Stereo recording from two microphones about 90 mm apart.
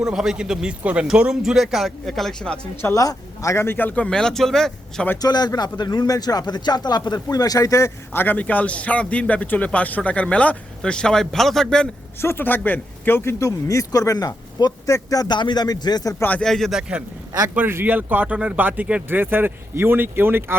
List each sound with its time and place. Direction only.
0.0 s a man's voice: 5° right (ahead or behind)
2.9 s speech: 40° left (ahead or behind); by 5.0 s 5° left (ahead or behind)
5.2 s speech: 45° left (ahead or behind); by 11.9 s 5° left (ahead or behind)
12.2 s speech: 25° left (ahead or behind); by 16.1 s 50° left (ahead or behind)
16.4 s a man's voice: 5° left (ahead or behind)
17.5 s speech: 25° right (ahead or behind)